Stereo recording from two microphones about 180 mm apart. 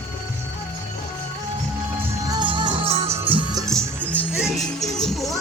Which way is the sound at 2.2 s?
25° right (ahead or behind).